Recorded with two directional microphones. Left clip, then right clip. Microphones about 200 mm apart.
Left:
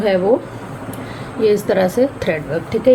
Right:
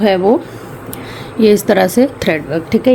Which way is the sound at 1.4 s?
55° right (ahead or behind).